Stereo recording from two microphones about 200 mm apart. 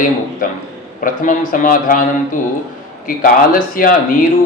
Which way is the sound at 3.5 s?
45° left (ahead or behind).